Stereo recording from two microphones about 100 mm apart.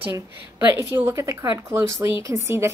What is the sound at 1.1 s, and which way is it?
Speech, 30° right (ahead or behind).